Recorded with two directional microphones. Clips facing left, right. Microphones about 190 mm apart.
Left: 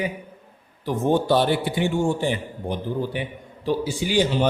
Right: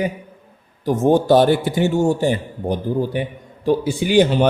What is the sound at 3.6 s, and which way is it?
Speech, 55° right (ahead or behind).